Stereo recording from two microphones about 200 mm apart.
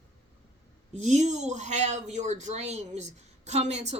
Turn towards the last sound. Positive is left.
turn(degrees=-35)  # may be behind; listen again after turning